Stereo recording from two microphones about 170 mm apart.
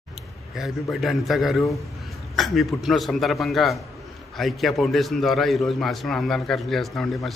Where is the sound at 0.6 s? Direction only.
Centre (ahead or behind).